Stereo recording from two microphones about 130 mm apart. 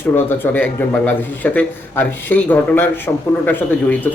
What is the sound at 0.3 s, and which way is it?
A man's voice, 15° left (ahead or behind).